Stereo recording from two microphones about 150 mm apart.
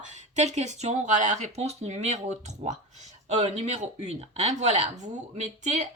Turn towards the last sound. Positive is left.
turn(degrees=-50)  # may be behind; listen again after turning